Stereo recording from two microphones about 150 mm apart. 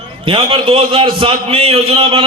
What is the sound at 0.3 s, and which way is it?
A man's voice, 35° right (ahead or behind).